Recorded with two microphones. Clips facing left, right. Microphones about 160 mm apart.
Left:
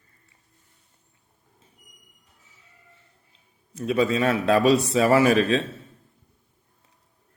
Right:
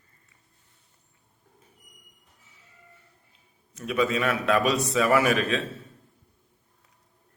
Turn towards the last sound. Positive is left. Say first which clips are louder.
# left 4 dB
turn(degrees=30)  # may be behind; listen again after turning